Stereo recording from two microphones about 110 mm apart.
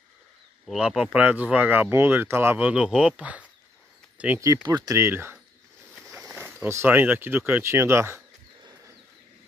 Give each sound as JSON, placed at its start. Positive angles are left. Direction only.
{"t": 0.7, "sound": "speech", "side_deg": -10}
{"t": 4.6, "sound": "speech", "side_deg": -40}
{"t": 4.9, "sound": "speech", "side_deg": -25}
{"t": 6.1, "sound": "a sound", "side_deg": -20}
{"t": 6.7, "sound": "speech", "side_deg": -20}